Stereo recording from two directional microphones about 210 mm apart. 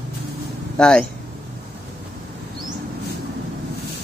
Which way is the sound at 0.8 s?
5° left (ahead or behind).